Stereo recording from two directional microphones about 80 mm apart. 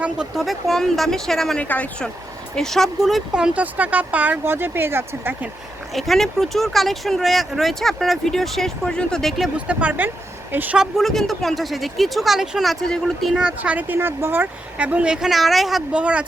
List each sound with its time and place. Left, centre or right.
0.3 s speech: centre
1.5 s speech: centre
2.6 s speech: centre; by 5.3 s right
5.9 s speech: centre
9.6 s speech: centre
10.8 s speech: centre
13.6 s speech: right
14.8 s speech: centre
15.9 s speech: centre